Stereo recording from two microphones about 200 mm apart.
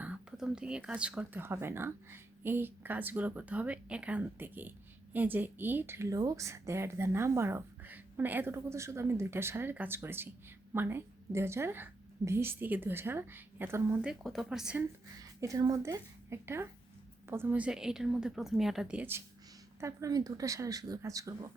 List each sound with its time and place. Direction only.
0.0 s speech: 5° right (ahead or behind)
15.2 s a woman's voice: 15° right (ahead or behind)